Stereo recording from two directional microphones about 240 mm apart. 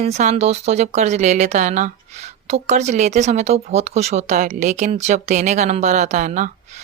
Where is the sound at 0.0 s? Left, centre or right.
Right.